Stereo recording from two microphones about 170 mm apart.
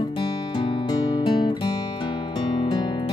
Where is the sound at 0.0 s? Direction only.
30° left (ahead or behind).